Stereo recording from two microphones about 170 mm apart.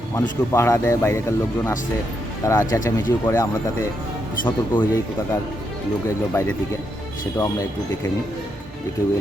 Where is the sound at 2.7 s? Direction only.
15° left (ahead or behind).